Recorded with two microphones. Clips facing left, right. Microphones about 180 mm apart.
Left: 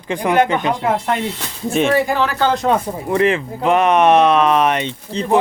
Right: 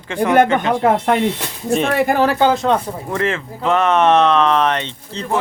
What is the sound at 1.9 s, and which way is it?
Speech, 55° right (ahead or behind).